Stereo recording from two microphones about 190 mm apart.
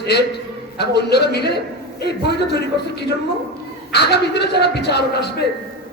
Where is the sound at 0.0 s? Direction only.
60° left (ahead or behind).